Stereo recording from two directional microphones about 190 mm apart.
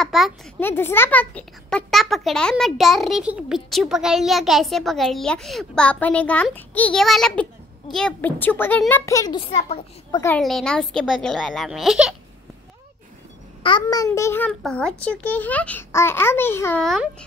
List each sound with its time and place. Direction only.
0.0 s a sound: centre (ahead or behind)
0.6 s a child's voice: 10° left (ahead or behind)
9.5 s a child's voice: 35° left (ahead or behind)
10.3 s a child's voice: centre (ahead or behind)
13.6 s a child's voice: 25° left (ahead or behind)
16.8 s a child's voice: centre (ahead or behind)